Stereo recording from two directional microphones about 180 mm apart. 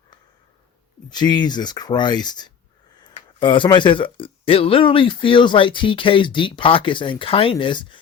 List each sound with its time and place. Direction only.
1.1 s speech: 25° left (ahead or behind)